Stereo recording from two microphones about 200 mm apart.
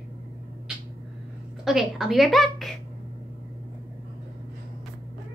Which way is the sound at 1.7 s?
Centre (ahead or behind).